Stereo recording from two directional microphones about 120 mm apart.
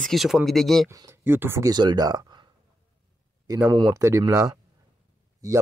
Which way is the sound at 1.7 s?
35° right (ahead or behind).